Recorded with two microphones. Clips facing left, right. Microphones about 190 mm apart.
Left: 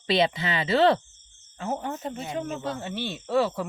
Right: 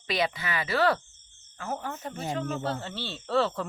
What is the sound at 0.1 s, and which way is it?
Speech, 25° left (ahead or behind).